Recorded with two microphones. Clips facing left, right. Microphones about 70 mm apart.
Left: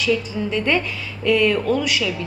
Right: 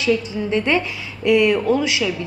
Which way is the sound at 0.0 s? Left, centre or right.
Centre.